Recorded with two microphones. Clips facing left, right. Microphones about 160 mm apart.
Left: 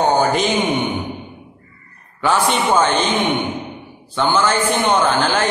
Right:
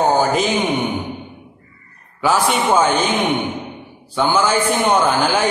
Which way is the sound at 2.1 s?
10° right (ahead or behind).